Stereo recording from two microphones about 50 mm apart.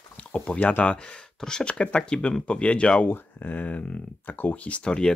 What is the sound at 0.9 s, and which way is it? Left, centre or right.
Speech, centre.